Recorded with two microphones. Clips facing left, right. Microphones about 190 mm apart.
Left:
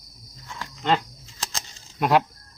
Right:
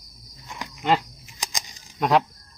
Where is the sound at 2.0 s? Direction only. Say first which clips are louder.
Even; centre (ahead or behind).